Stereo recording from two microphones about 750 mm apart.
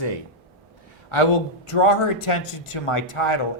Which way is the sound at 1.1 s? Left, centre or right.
Left.